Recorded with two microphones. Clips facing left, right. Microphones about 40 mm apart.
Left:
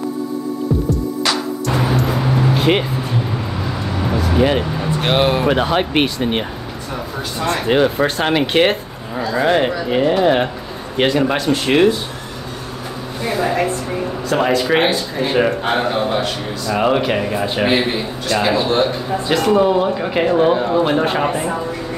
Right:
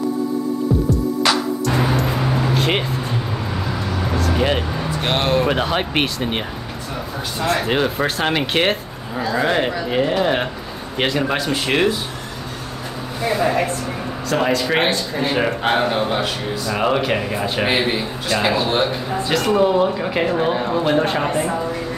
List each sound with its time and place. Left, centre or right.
0.8 s music: centre
4.4 s speech: centre
5.0 s speech: centre
14.3 s speech: centre